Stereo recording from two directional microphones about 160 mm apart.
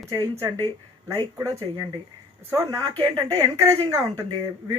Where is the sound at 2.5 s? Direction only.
20° right (ahead or behind).